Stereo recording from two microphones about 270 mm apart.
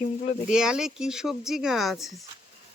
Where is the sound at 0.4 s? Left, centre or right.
Centre.